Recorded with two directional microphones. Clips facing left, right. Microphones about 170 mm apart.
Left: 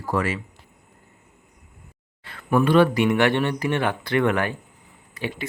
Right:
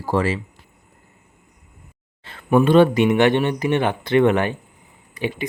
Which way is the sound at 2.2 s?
25° right (ahead or behind).